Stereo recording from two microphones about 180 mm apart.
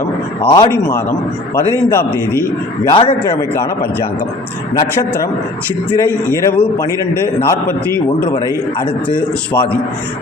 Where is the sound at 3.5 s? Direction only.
15° left (ahead or behind).